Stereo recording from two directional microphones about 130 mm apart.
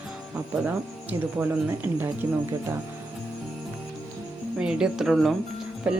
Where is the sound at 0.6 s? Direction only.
15° right (ahead or behind).